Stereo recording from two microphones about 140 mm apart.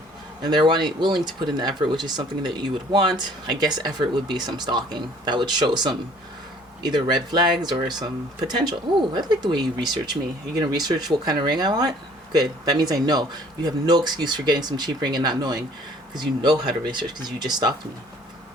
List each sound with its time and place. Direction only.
0.4 s speech: 30° right (ahead or behind)